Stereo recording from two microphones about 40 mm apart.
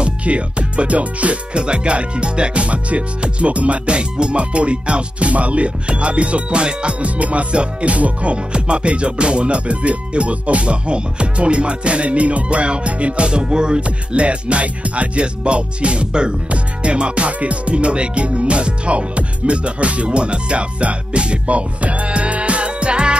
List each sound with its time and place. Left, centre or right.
0.0 s speech: right